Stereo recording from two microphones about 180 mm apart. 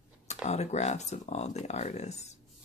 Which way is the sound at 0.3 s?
40° left (ahead or behind).